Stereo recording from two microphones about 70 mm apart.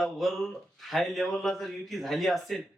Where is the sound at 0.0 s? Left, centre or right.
Centre.